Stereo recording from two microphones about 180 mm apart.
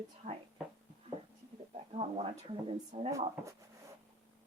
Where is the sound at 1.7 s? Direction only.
35° right (ahead or behind).